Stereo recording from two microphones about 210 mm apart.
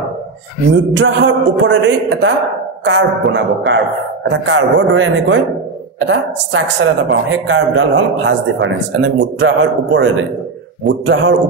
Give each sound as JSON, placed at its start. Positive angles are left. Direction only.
{"t": 0.9, "sound": "a woman's voice", "side_deg": -60}